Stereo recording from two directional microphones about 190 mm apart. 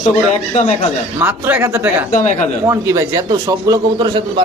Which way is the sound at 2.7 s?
15° right (ahead or behind).